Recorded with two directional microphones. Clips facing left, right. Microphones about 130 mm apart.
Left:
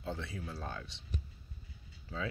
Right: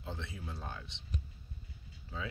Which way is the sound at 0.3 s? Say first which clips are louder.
Left 2 dB; 20° right (ahead or behind).